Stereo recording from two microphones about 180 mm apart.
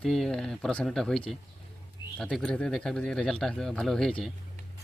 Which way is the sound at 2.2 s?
5° left (ahead or behind).